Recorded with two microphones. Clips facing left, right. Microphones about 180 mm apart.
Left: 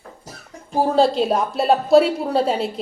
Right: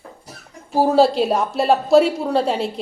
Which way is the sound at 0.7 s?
5° right (ahead or behind).